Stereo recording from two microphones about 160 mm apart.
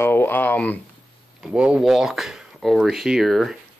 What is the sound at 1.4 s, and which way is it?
Speech, 5° right (ahead or behind).